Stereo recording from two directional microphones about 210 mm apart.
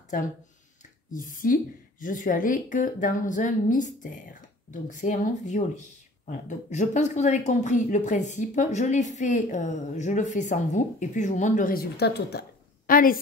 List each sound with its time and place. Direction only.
1.1 s speech: 40° left (ahead or behind)